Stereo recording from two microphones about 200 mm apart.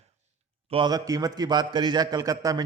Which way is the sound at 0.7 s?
20° right (ahead or behind).